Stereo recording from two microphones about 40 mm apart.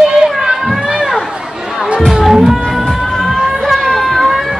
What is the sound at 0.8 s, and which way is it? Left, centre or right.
Run, centre.